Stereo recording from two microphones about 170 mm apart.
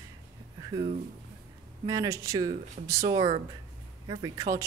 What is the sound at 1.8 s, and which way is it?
Speech, 20° right (ahead or behind).